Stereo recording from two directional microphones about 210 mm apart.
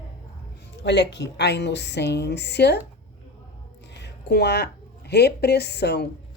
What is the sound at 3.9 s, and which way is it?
A woman's voice, 50° left (ahead or behind).